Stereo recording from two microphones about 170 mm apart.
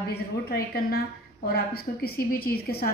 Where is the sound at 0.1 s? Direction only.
65° left (ahead or behind).